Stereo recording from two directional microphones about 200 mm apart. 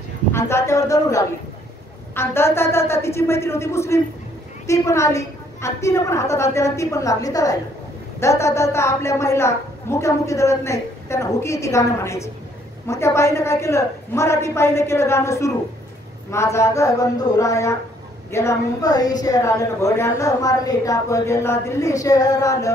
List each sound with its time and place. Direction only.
0.3 s a woman's voice: 15° left (ahead or behind)